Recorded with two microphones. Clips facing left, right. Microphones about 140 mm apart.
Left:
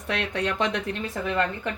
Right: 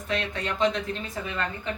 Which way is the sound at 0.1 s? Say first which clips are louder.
Left 2 dB; 65° left (ahead or behind).